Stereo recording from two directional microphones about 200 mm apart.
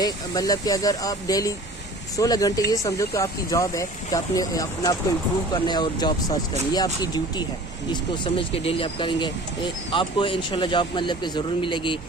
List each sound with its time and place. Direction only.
0.0 s speech: 20° left (ahead or behind)